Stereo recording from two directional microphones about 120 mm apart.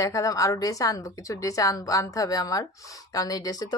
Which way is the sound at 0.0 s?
25° left (ahead or behind).